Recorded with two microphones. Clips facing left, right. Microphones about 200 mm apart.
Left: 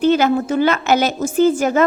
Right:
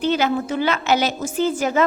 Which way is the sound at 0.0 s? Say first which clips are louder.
Left 5 dB; 50° left (ahead or behind).